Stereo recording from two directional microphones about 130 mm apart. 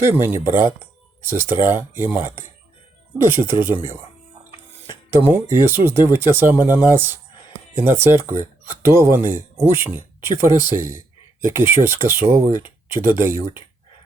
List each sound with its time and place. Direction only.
0.0 s speech: 15° right (ahead or behind)
4.9 s speech: 15° right (ahead or behind)